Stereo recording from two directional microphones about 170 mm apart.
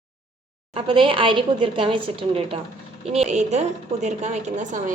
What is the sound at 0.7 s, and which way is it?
A woman's voice, 30° right (ahead or behind).